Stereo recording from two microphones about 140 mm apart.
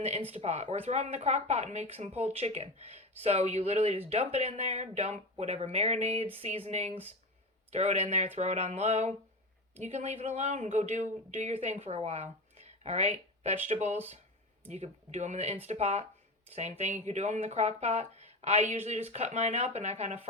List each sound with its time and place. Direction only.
0.0 s a woman's voice: 50° right (ahead or behind)